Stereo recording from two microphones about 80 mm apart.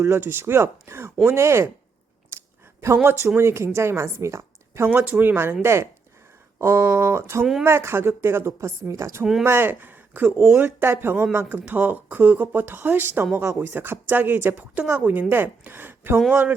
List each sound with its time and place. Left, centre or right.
0.0 s a woman's voice: right
2.3 s a sound: right
2.8 s a woman's voice: right